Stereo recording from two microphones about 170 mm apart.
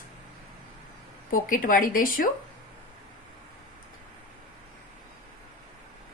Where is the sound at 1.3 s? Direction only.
55° left (ahead or behind).